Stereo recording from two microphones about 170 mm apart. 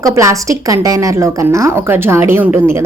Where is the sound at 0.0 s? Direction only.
20° right (ahead or behind).